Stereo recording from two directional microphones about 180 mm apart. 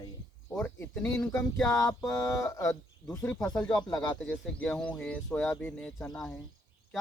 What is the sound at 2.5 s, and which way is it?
Speech, 20° left (ahead or behind).